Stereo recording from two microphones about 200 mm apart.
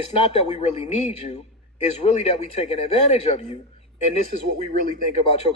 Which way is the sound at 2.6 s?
35° left (ahead or behind).